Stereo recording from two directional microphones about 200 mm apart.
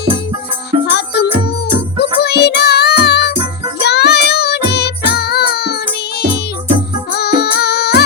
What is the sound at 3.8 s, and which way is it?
Child singing, 55° left (ahead or behind).